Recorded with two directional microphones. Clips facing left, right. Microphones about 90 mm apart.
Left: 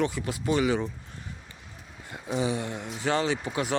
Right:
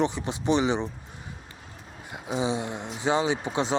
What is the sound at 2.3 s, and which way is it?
Speech, 20° right (ahead or behind).